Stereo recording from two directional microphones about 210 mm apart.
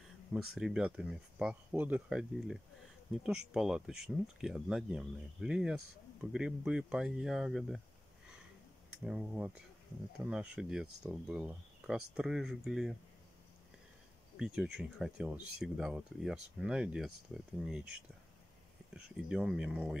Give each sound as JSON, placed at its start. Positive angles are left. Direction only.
{"t": 0.3, "sound": "speech", "side_deg": 0}
{"t": 9.0, "sound": "speech", "side_deg": -5}
{"t": 14.3, "sound": "speech", "side_deg": -5}